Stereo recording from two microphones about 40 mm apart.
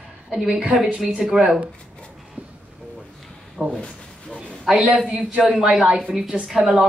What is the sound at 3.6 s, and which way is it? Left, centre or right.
Speech, right.